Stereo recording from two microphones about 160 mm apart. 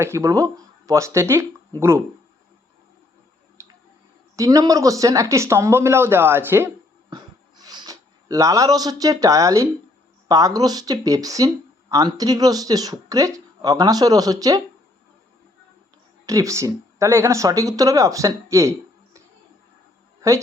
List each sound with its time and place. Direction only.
0.0 s speech: 20° right (ahead or behind)
3.6 s tick-tock: 15° right (ahead or behind)
4.4 s speech: 20° right (ahead or behind)
7.1 s a sound: 25° right (ahead or behind)
10.2 s speech: 20° right (ahead or behind)
16.2 s speech: 20° right (ahead or behind)